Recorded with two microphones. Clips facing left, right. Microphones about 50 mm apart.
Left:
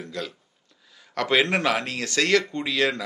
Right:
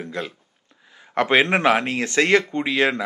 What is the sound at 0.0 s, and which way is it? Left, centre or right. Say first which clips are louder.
Speech: right 4 dB; right.